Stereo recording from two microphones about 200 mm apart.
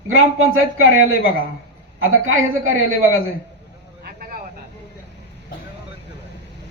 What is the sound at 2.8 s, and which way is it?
Speech, 90° right.